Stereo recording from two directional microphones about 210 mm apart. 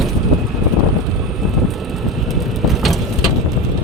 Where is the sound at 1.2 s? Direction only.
Centre (ahead or behind).